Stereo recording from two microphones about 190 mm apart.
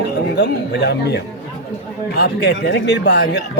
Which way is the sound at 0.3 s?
60° left (ahead or behind).